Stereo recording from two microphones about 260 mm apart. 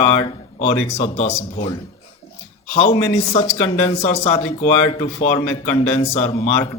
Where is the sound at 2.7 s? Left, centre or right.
Left.